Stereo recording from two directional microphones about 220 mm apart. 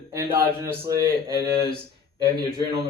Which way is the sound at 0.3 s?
10° right (ahead or behind).